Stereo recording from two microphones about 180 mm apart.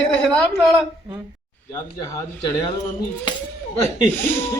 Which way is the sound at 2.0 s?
20° left (ahead or behind).